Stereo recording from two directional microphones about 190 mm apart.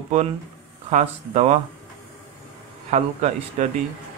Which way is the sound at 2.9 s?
40° right (ahead or behind).